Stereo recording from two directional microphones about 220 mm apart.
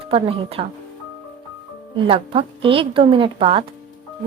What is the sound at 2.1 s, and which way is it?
A woman's voice, 25° right (ahead or behind).